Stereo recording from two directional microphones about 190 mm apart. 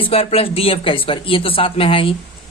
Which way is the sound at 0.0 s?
30° left (ahead or behind).